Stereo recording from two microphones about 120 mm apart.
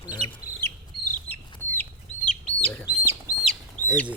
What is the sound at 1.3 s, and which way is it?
Chicken, 15° left (ahead or behind).